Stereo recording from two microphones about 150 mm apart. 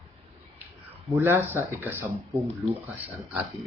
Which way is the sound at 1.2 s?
15° right (ahead or behind).